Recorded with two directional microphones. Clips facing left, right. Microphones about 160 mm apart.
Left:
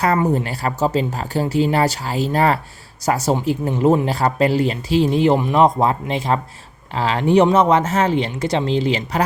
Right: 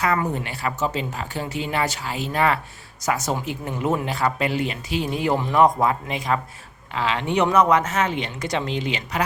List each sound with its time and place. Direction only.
0.0 s speech: 35° left (ahead or behind)
7.4 s speech: 25° left (ahead or behind)